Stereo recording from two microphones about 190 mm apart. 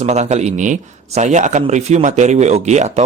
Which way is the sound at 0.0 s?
35° right (ahead or behind).